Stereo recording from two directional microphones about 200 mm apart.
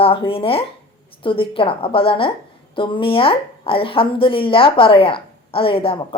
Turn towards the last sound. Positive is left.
turn(degrees=25)  # may be behind; listen again after turning